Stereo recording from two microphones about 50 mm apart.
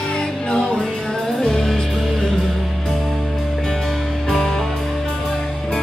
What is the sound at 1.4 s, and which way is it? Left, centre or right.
Music, centre.